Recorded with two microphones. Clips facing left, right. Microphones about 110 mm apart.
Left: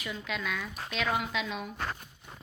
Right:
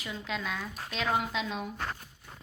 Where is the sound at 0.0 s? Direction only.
35° right (ahead or behind).